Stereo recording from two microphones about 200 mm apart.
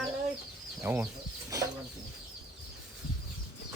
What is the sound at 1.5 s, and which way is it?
Bird, 15° right (ahead or behind).